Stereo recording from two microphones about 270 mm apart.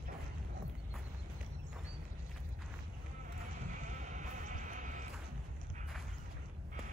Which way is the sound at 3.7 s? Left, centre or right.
Right.